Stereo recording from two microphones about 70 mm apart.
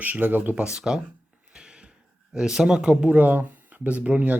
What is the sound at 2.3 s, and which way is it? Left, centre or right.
Speech, centre.